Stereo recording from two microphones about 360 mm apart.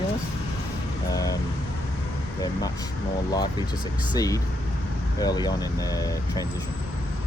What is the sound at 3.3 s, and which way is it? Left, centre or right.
Speech, centre.